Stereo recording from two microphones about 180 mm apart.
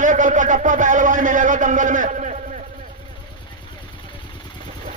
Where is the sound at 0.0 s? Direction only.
45° right (ahead or behind).